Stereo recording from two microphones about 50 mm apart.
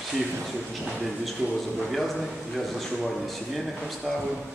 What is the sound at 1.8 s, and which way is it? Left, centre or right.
A man's voice, centre.